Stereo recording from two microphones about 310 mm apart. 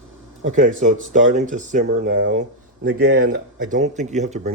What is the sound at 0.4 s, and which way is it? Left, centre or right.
Speech, right.